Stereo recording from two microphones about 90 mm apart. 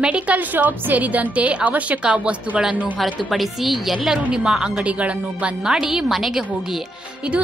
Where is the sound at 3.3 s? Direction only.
Centre (ahead or behind).